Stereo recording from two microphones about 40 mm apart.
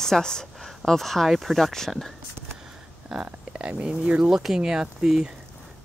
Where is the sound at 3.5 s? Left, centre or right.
Right.